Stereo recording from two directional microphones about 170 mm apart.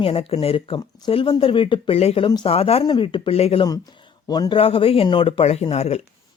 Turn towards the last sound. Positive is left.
turn(degrees=40)  # may be behind; listen again after turning